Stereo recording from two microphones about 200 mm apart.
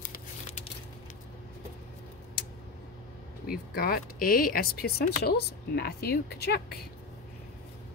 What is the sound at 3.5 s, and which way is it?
Speech, 45° left (ahead or behind).